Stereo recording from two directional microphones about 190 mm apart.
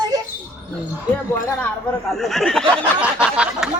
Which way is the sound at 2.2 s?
Centre (ahead or behind).